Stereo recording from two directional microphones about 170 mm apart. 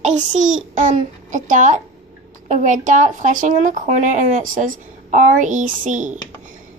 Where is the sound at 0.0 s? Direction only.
45° right (ahead or behind).